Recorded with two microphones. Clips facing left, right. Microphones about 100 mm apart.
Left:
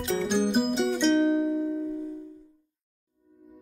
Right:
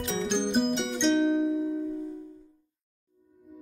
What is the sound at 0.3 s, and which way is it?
Music, 5° left (ahead or behind).